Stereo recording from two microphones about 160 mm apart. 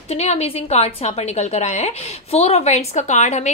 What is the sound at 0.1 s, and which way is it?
A woman's voice, 45° left (ahead or behind).